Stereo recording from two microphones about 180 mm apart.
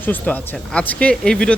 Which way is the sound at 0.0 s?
10° left (ahead or behind).